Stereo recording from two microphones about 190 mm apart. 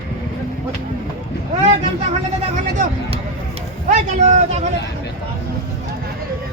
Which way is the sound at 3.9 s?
40° right (ahead or behind).